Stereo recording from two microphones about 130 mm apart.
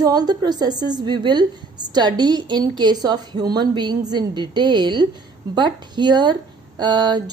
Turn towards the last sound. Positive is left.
turn(degrees=-35)  # may be behind; listen again after turning